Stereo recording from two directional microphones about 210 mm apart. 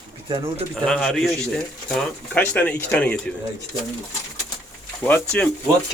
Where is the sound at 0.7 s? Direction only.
5° left (ahead or behind).